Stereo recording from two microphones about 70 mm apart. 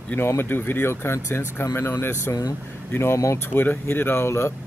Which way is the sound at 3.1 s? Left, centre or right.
Left.